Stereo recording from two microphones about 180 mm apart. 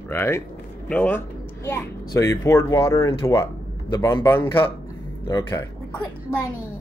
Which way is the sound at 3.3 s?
20° left (ahead or behind).